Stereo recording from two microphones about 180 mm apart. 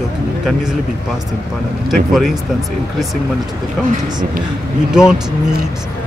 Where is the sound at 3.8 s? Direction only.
Centre (ahead or behind).